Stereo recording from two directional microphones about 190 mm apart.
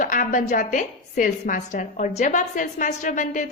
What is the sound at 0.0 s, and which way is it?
A woman's voice, 45° left (ahead or behind).